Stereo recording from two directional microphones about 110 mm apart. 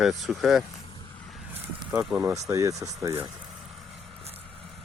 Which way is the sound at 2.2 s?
30° right (ahead or behind).